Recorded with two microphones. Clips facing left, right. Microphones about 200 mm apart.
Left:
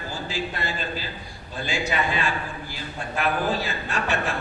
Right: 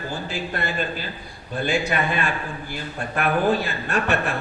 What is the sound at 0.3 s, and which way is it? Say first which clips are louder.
A man's voice: even; 55° right (ahead or behind).